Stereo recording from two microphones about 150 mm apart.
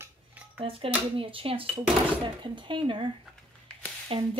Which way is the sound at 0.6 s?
35° right (ahead or behind).